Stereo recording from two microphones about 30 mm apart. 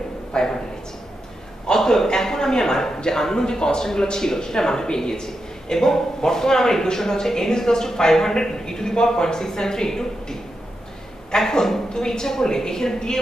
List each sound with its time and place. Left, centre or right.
0.3 s a man's voice: left
1.7 s a man's voice: centre
11.3 s a man's voice: centre